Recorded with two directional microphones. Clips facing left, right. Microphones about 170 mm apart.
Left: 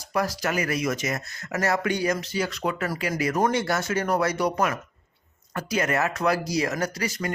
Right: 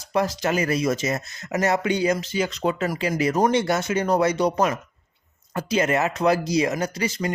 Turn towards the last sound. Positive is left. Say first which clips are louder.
# right 3 dB
turn(degrees=-20)  # may be behind; listen again after turning